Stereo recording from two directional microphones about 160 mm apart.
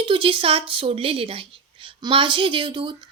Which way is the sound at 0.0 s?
30° right (ahead or behind).